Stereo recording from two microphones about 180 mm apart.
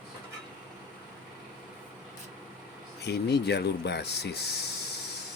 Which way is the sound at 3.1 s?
65° left (ahead or behind).